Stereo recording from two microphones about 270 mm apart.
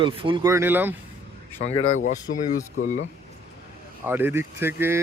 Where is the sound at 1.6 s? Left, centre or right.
Left.